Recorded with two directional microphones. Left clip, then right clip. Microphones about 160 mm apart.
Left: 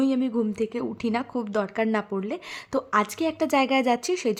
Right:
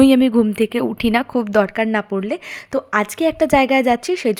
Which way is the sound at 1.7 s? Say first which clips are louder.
Right 6 dB; 25° right (ahead or behind).